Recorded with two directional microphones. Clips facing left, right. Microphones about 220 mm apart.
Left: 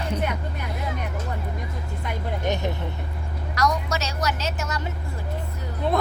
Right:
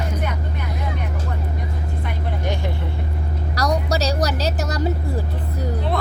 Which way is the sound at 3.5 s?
35° right (ahead or behind).